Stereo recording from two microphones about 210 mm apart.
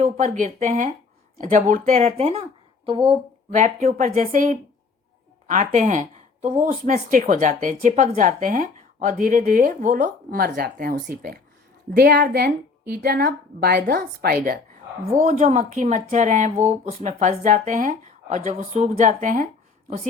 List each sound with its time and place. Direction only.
0.0 s a woman's voice: 35° right (ahead or behind)